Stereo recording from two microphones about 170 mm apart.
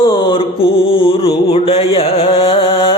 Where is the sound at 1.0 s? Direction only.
30° left (ahead or behind).